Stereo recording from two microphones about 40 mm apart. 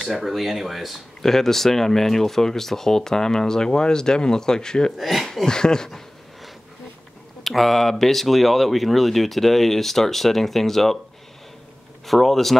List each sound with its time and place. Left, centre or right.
0.1 s speech: centre
1.2 s speech: centre
4.9 s speech: centre
5.5 s speech: centre
7.4 s speech: centre
12.1 s speech: centre